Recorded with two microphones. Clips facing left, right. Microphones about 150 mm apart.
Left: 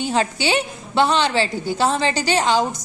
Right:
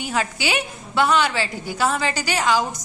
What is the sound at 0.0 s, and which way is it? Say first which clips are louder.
A woman's voice: left 4 dB; 30° left (ahead or behind).